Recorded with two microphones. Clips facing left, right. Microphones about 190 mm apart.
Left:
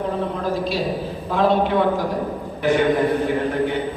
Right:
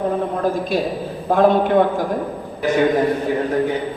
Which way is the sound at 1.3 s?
50° right (ahead or behind).